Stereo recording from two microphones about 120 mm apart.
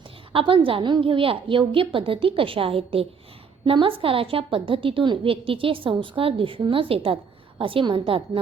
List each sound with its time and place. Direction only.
0.3 s a woman's voice: 45° right (ahead or behind)